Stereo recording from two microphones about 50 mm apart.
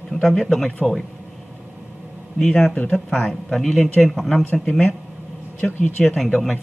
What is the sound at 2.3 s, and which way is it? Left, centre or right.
A man's voice, centre.